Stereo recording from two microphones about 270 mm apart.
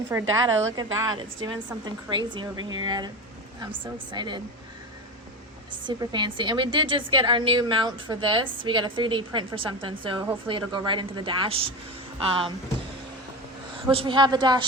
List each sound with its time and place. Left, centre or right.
0.1 s a woman's voice: centre
4.1 s a woman's voice: centre
5.8 s a woman's voice: centre
13.7 s a woman's voice: centre